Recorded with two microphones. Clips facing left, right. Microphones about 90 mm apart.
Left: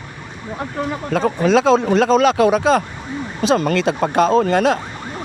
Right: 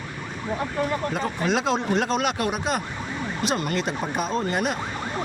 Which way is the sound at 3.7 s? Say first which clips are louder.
Left 10 dB; 90° left.